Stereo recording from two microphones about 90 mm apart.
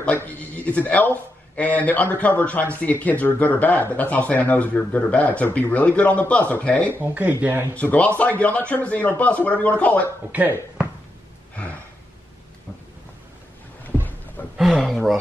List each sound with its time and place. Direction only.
0.0 s a man's voice: 20° left (ahead or behind)
6.9 s speech: 20° right (ahead or behind)
7.7 s a man's voice: 15° left (ahead or behind)
14.6 s speech: centre (ahead or behind)